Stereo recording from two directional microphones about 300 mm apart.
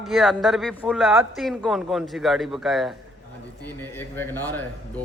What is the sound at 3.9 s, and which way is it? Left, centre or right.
Speech, centre.